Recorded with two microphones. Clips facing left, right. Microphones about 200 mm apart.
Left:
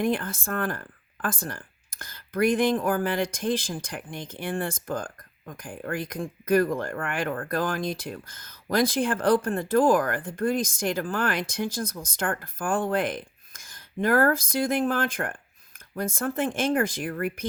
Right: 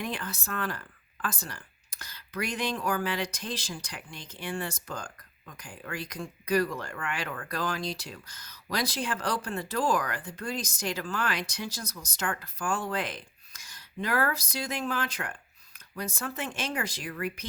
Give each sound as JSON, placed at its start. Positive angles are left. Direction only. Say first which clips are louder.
{"t": 0.0, "sound": "speech", "louder": "left 9 dB", "side_deg": 50}